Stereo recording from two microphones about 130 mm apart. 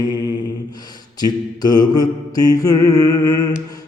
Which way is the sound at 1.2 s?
30° left (ahead or behind).